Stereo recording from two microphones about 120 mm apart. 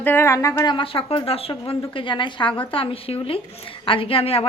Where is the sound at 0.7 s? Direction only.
50° left (ahead or behind).